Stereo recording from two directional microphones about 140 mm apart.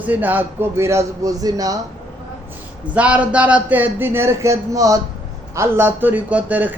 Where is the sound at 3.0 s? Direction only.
10° right (ahead or behind).